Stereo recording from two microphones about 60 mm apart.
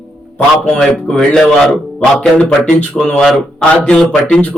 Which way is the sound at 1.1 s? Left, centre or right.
Centre.